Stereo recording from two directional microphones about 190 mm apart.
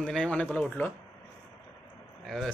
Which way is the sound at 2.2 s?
Centre (ahead or behind).